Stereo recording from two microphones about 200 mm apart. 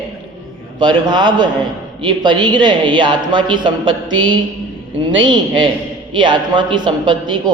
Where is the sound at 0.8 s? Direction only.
20° right (ahead or behind).